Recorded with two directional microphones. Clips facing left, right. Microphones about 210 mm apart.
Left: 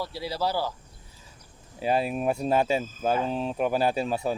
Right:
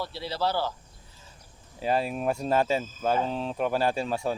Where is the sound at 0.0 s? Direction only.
10° left (ahead or behind).